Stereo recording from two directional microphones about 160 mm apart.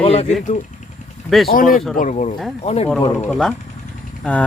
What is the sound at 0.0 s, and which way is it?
Speech, 40° left (ahead or behind).